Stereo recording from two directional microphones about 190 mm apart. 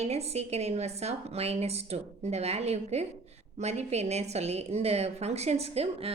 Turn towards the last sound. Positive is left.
turn(degrees=-30)  # may be behind; listen again after turning